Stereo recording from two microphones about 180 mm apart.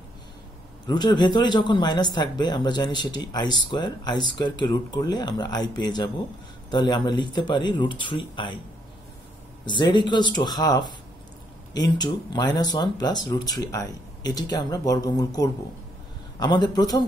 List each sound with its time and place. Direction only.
0.8 s speech: 25° left (ahead or behind)
9.7 s speech: 25° left (ahead or behind)